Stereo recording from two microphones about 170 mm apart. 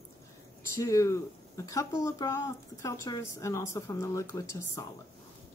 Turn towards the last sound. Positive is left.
turn(degrees=20)  # may be behind; listen again after turning